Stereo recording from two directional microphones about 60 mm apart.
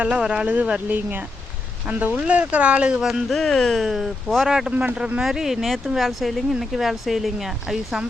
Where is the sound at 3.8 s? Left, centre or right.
Centre.